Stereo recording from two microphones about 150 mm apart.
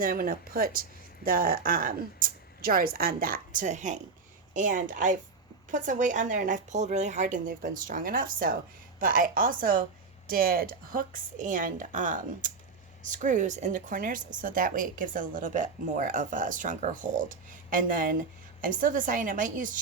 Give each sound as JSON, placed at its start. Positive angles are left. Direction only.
{"t": 0.0, "sound": "speech", "side_deg": -70}